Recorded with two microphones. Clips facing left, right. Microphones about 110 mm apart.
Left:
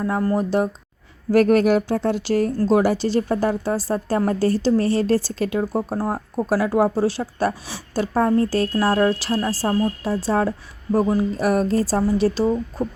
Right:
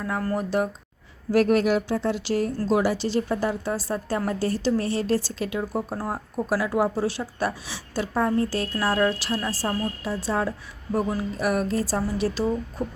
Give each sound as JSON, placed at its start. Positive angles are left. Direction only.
{"t": 0.0, "sound": "speech", "side_deg": 25}
{"t": 1.3, "sound": "speech", "side_deg": 50}